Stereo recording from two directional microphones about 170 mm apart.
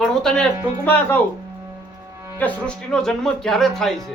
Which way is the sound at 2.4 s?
5° left (ahead or behind).